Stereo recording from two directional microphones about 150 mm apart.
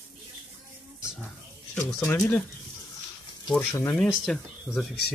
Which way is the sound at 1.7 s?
15° left (ahead or behind).